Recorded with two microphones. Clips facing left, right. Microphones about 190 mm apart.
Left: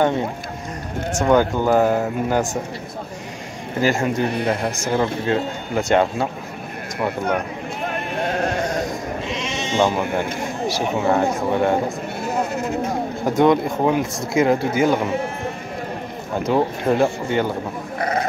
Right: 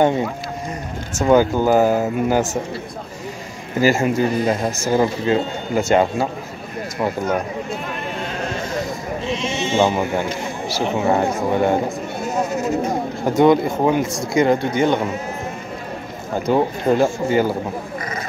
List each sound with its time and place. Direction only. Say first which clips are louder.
1.2 s speech: right 2 dB; 5° right (ahead or behind)
3.8 s speech: right 3 dB; 5° right (ahead or behind)
4.3 s speech: right 2 dB; 65° left (ahead or behind)
4.8 s speech: right 3 dB; 5° right (ahead or behind)
8.2 s a sound: left 7 dB; 55° left (ahead or behind)
9.8 s speech: right 1 dB; 5° right (ahead or behind)
12.8 s speech: right 1 dB; centre (ahead or behind)
16.3 s speech: right 1 dB; centre (ahead or behind)
17.9 s speech: left 5 dB; 60° left (ahead or behind)